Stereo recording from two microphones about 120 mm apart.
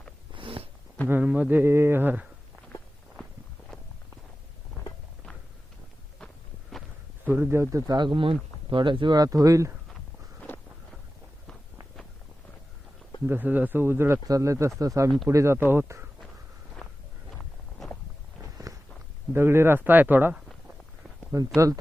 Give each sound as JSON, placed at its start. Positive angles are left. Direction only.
{"t": 0.3, "sound": "walk", "side_deg": -50}
{"t": 1.0, "sound": "a man's voice", "side_deg": -15}
{"t": 3.7, "sound": "walk", "side_deg": 5}
{"t": 6.1, "sound": "walk", "side_deg": 5}
{"t": 7.3, "sound": "speech", "side_deg": -15}
{"t": 10.5, "sound": "wind noise", "side_deg": 15}
{"t": 13.2, "sound": "a man's voice", "side_deg": -15}
{"t": 16.8, "sound": "walk", "side_deg": 5}
{"t": 17.3, "sound": "a sound", "side_deg": 5}
{"t": 18.5, "sound": "walk", "side_deg": -30}
{"t": 19.3, "sound": "a man's voice", "side_deg": -20}
{"t": 21.3, "sound": "a man's voice", "side_deg": -25}